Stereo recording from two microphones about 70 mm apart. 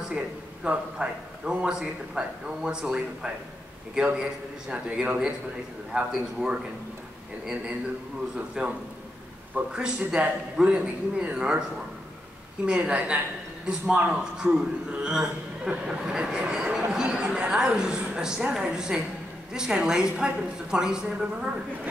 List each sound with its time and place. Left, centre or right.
0.7 s a man's voice: centre
8.4 s a man's voice: centre
12.6 s a woman's voice: centre